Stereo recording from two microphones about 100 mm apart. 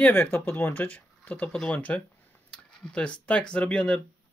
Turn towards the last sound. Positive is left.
turn(degrees=10)  # may be behind; listen again after turning